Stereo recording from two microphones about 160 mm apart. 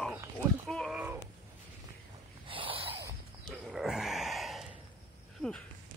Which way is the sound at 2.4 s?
35° right (ahead or behind).